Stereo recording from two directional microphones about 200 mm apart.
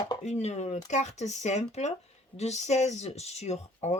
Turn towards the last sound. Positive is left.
turn(degrees=30)  # may be behind; listen again after turning